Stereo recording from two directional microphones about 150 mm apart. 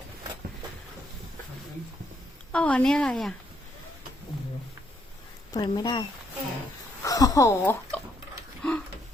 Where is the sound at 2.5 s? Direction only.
10° left (ahead or behind).